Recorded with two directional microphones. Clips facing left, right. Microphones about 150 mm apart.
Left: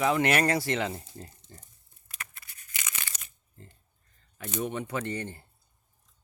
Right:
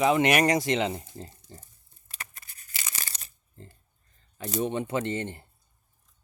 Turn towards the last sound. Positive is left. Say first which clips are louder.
# right 4 dB
turn(degrees=-25)  # may be behind; listen again after turning